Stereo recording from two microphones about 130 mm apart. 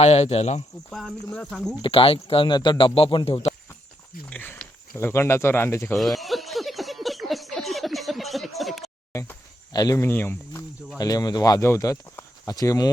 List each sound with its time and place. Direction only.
0.0 s speech: 55° left (ahead or behind)
0.9 s speech: 5° left (ahead or behind)
1.8 s speech: 45° left (ahead or behind)
4.3 s speech: 10° left (ahead or behind)
6.0 s a sound: centre (ahead or behind)
9.7 s speech: 30° left (ahead or behind)
10.0 s speech: 15° left (ahead or behind)
10.9 s speech: 30° left (ahead or behind)